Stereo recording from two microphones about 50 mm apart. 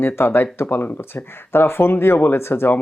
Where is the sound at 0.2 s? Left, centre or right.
Left.